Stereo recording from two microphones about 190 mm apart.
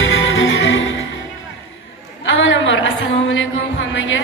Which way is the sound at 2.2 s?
85° left.